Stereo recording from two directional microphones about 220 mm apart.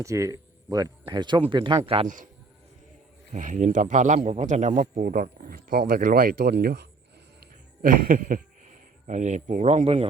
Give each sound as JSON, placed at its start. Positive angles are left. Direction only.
{"t": 0.0, "sound": "speech", "side_deg": -15}
{"t": 3.3, "sound": "a man's voice", "side_deg": -35}